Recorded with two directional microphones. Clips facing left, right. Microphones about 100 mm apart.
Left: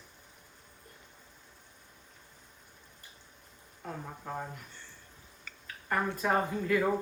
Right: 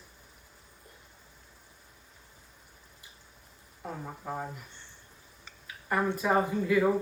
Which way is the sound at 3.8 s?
5° right (ahead or behind).